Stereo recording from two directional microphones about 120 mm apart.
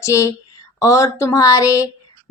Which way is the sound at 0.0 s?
25° left (ahead or behind).